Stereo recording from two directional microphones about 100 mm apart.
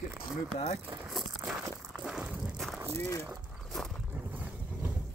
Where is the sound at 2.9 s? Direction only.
30° left (ahead or behind).